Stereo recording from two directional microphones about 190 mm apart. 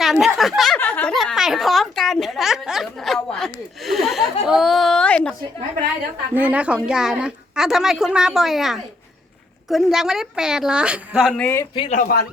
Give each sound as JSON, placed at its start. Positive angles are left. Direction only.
{"t": 0.0, "sound": "a woman's voice", "side_deg": 0}
{"t": 6.3, "sound": "a woman's voice", "side_deg": -10}
{"t": 11.7, "sound": "a man's voice", "side_deg": 25}
{"t": 11.9, "sound": "speech", "side_deg": 50}